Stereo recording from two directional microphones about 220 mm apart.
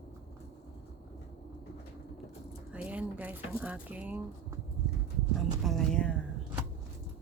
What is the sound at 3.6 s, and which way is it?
Speech, 5° right (ahead or behind).